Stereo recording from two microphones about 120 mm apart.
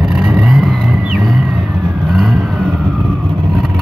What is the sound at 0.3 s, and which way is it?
Vehicle, centre (ahead or behind).